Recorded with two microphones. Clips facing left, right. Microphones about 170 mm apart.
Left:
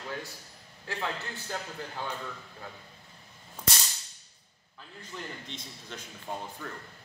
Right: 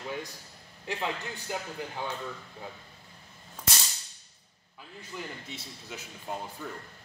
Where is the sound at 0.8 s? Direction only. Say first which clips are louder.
Right 2 dB; 15° right (ahead or behind).